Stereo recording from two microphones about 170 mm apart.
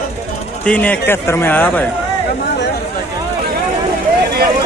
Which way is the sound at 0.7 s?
10° left (ahead or behind).